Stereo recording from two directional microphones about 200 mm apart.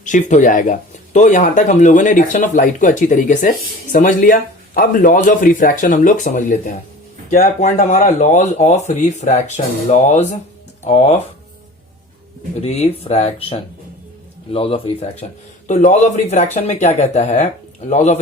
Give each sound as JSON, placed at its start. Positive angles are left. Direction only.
{"t": 0.0, "sound": "speech", "side_deg": 40}
{"t": 12.6, "sound": "speech", "side_deg": 35}